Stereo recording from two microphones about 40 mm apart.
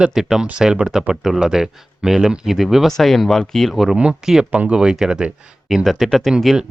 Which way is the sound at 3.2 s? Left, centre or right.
Centre.